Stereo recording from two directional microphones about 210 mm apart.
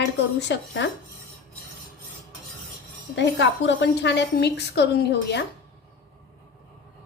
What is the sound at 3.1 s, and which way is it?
A woman's voice, 55° left (ahead or behind).